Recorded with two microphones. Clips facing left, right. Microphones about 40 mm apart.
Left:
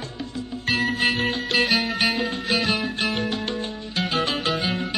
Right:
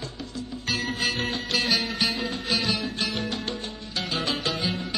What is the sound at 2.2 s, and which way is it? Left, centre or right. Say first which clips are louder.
Music: left 3 dB; left.